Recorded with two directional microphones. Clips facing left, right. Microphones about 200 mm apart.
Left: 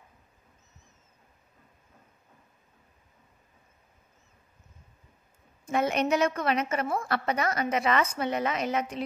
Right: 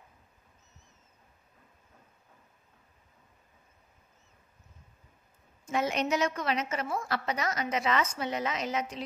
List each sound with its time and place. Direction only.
5.7 s a woman's voice: 55° left (ahead or behind)